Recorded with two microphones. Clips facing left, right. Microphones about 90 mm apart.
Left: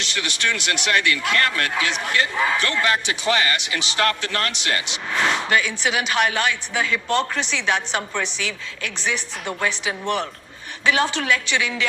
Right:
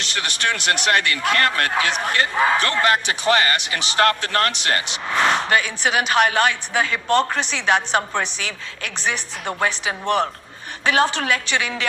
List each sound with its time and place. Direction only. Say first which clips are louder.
0.0 s speech: right 1 dB; 45° right (ahead or behind)